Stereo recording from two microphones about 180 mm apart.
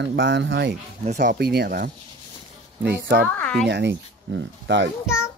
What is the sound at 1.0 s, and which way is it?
Speech, 45° right (ahead or behind).